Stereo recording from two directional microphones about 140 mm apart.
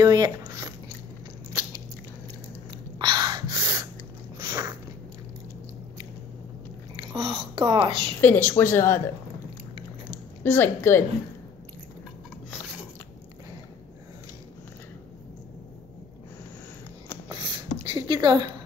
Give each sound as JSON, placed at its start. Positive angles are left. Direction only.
{"t": 0.0, "sound": "speech", "side_deg": -25}
{"t": 3.0, "sound": "gasp", "side_deg": -30}
{"t": 4.4, "sound": "biting", "side_deg": -25}
{"t": 7.0, "sound": "speech", "side_deg": -35}
{"t": 8.2, "sound": "speech", "side_deg": 15}
{"t": 10.1, "sound": "a woman's voice", "side_deg": 15}
{"t": 17.8, "sound": "a sound", "side_deg": -35}